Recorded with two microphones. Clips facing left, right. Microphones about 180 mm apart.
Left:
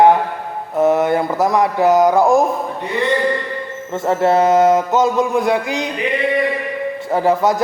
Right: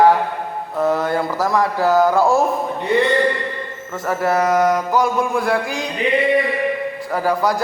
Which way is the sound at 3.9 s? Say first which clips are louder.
Left 4 dB; 25° left (ahead or behind).